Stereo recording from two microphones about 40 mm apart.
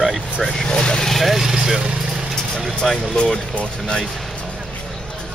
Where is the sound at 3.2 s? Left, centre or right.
Left.